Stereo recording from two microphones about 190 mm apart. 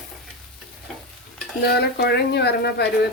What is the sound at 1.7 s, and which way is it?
A woman's voice, 60° left (ahead or behind).